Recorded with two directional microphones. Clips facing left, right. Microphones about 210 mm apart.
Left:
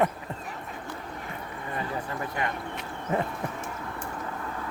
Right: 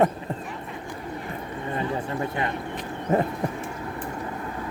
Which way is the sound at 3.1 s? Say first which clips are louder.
Right 6 dB; 40° right (ahead or behind).